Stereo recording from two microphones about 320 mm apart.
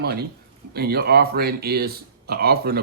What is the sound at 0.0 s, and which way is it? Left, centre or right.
Speech, right.